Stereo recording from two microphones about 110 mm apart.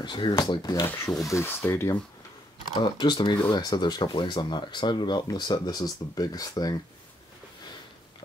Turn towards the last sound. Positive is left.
turn(degrees=35)  # may be behind; listen again after turning